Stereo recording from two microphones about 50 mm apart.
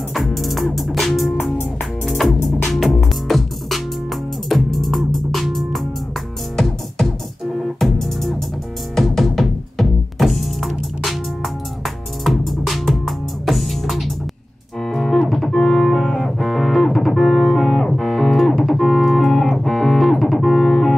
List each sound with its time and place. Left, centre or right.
0.1 s music: centre
1.3 s music: left
1.8 s music: centre